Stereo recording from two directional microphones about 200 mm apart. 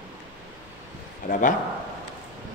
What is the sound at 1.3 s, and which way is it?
Speech, 40° left (ahead or behind).